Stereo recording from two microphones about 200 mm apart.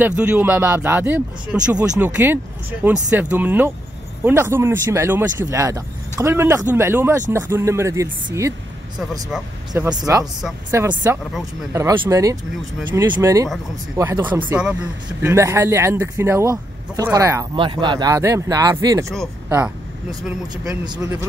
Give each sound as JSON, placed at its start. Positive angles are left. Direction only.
{"t": 0.0, "sound": "speech", "side_deg": -5}